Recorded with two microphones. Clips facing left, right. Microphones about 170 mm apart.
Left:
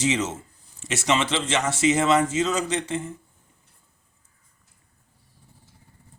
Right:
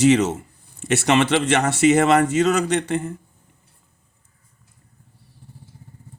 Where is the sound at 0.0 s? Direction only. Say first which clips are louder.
Right 9 dB; 65° right (ahead or behind).